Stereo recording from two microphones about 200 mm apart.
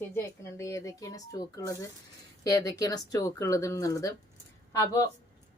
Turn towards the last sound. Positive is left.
turn(degrees=15)  # may be behind; listen again after turning